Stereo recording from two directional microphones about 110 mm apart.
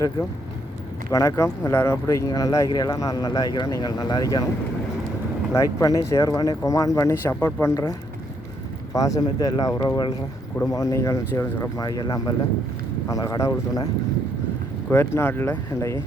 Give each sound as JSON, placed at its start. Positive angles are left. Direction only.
{"t": 1.1, "sound": "speech", "side_deg": 25}
{"t": 5.5, "sound": "speech", "side_deg": 30}
{"t": 14.8, "sound": "speech", "side_deg": 20}